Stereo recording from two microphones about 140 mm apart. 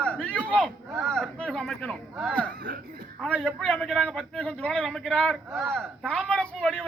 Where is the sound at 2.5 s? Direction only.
90° right.